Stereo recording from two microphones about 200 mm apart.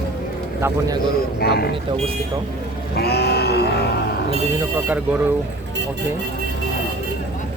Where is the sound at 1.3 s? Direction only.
50° left (ahead or behind).